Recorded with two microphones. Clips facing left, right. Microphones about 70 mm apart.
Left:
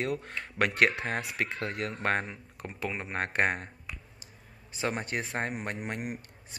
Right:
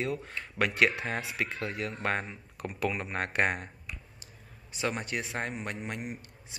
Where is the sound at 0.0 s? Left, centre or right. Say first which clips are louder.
Left 1 dB; left.